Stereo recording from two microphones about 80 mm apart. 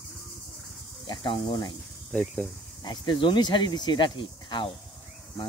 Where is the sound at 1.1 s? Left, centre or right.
Left.